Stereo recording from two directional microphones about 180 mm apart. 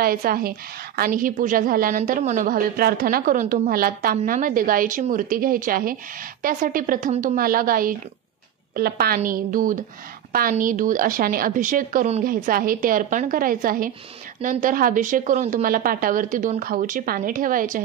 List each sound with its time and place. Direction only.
0.0 s a woman's voice: 55° right (ahead or behind)